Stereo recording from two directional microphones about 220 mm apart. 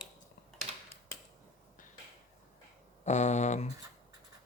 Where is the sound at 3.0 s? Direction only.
30° left (ahead or behind).